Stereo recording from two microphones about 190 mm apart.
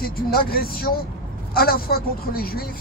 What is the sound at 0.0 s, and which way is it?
Speech, 50° left (ahead or behind).